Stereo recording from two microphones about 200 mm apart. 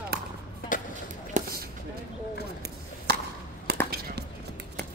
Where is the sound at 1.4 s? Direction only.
40° right (ahead or behind).